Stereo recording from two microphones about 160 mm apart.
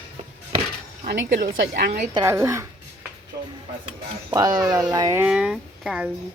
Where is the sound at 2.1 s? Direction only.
20° right (ahead or behind).